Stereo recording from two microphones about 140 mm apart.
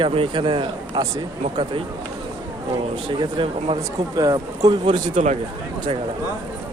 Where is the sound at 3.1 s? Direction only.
40° right (ahead or behind).